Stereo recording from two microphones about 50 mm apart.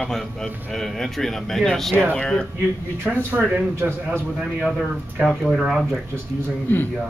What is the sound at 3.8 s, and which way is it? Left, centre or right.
Speech, right.